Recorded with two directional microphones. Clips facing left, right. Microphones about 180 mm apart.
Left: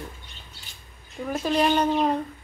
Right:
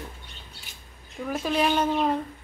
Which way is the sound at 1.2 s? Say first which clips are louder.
Left 2 dB; centre (ahead or behind).